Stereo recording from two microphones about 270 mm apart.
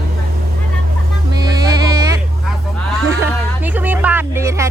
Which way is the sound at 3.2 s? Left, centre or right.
Centre.